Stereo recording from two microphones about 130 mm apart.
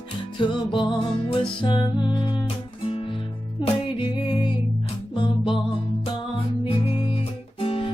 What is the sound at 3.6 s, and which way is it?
Music, 40° left (ahead or behind).